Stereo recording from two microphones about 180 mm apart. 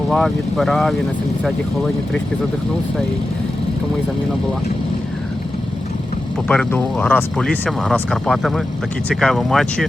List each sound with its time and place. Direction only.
0.1 s speech: centre (ahead or behind)
6.5 s speech: 5° left (ahead or behind)